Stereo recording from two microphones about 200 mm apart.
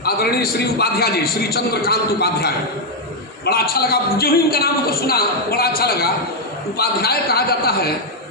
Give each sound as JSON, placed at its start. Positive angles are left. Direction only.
{"t": 0.0, "sound": "a man's voice", "side_deg": 50}